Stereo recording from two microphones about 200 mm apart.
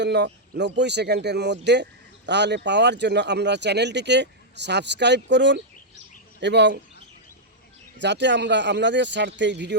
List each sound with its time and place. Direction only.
0.0 s speech: 60° right (ahead or behind)
8.0 s speech: 60° right (ahead or behind)